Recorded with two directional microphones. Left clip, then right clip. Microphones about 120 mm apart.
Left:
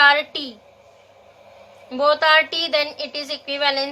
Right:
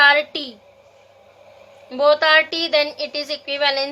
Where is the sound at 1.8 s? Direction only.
35° right (ahead or behind).